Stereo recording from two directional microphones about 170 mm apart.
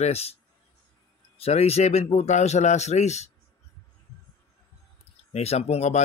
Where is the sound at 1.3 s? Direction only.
35° left (ahead or behind).